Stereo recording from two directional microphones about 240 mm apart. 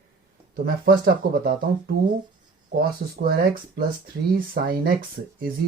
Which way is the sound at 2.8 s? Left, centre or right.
Right.